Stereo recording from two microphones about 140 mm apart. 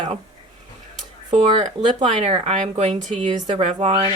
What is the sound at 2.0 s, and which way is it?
Speech, 45° right (ahead or behind).